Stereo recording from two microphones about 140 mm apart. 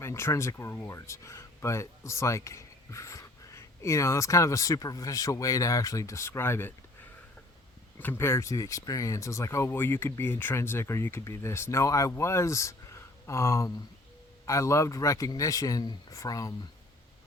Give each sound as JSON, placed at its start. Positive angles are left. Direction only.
{"t": 0.0, "sound": "speech", "side_deg": 20}
{"t": 7.9, "sound": "speech", "side_deg": 15}